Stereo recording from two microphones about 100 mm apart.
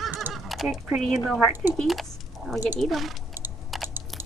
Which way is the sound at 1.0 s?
Centre (ahead or behind).